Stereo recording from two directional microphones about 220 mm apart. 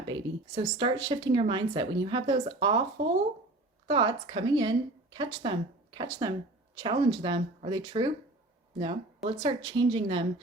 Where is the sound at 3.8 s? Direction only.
20° right (ahead or behind).